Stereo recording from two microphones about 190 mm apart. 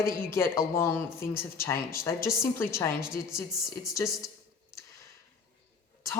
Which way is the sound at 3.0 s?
5° right (ahead or behind).